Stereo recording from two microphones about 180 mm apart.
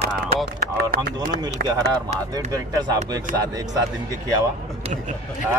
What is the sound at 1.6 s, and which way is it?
Speech, 65° right (ahead or behind).